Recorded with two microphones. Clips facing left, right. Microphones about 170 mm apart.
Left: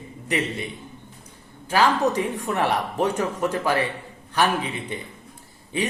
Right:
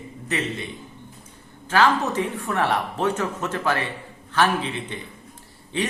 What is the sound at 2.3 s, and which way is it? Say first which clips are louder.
Speech: even; 15° left (ahead or behind).